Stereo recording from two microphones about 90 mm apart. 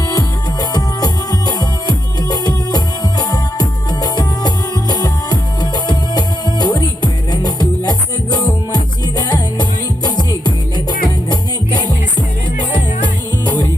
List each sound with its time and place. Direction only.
0.1 s music: 50° left (ahead or behind)